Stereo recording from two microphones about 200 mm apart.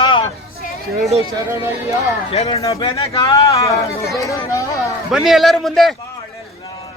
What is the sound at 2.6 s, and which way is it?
Speech, 15° left (ahead or behind).